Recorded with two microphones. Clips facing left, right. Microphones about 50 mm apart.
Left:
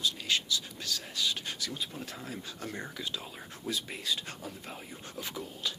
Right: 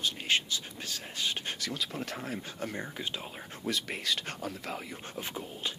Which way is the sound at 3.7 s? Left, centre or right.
Right.